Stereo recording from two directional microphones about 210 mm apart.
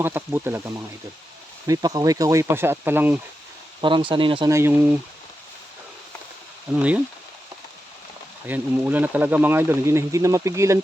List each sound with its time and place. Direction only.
0.0 s speech: 10° right (ahead or behind)
3.8 s speech: 25° right (ahead or behind)
4.5 s speech: 10° right (ahead or behind)
6.7 s speech: 5° right (ahead or behind)
8.4 s speech: 10° right (ahead or behind)